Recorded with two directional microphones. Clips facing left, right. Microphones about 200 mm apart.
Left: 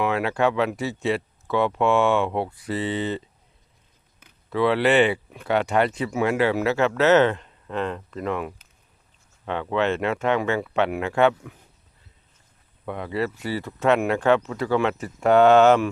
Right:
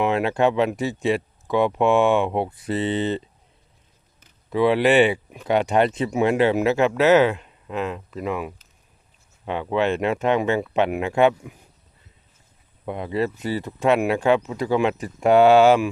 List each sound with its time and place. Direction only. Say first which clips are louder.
0.0 s speech: right 2 dB; 20° right (ahead or behind)
4.4 s speech: right 2 dB; 15° right (ahead or behind)
12.8 s speech: right 2 dB; 20° right (ahead or behind)